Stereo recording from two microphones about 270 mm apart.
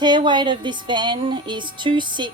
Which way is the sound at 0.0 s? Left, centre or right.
Centre.